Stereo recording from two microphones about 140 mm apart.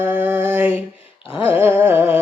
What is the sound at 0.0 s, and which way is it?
Mantra, 10° right (ahead or behind).